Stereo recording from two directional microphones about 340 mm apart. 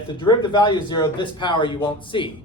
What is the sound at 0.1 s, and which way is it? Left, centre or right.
Speech, centre.